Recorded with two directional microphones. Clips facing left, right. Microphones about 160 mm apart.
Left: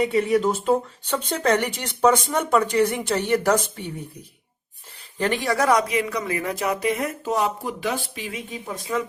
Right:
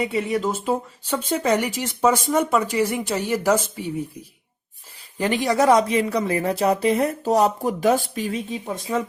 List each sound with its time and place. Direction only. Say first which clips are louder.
0.0 s speech: left 3 dB; centre (ahead or behind)
5.1 s speech: right 2 dB; 15° right (ahead or behind)